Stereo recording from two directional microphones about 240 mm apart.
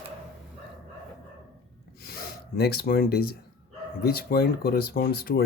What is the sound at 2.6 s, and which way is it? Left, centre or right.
A man's voice, left.